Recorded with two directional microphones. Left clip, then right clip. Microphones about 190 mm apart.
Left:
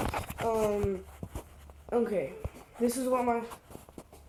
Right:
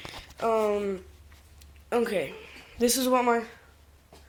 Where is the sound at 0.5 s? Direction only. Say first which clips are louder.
Right 3 dB; 25° right (ahead or behind).